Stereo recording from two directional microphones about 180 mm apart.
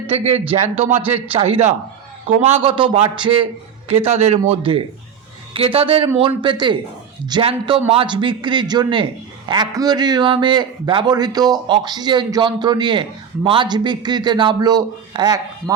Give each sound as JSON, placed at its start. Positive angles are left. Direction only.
{"t": 0.1, "sound": "a man's voice", "side_deg": -35}